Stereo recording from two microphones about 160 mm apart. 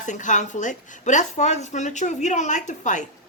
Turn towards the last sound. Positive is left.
turn(degrees=50)  # may be behind; listen again after turning